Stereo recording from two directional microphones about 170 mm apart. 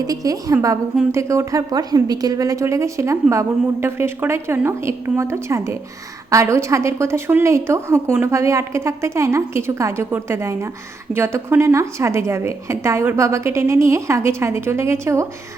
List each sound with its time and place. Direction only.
0.1 s a woman's voice: 20° right (ahead or behind)